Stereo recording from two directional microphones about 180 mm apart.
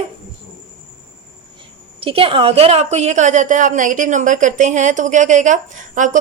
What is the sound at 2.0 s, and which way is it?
A woman's voice, 30° right (ahead or behind).